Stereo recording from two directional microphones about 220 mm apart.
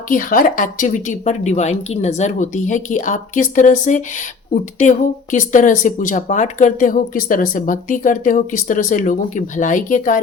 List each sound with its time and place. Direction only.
0.1 s speech: 40° left (ahead or behind)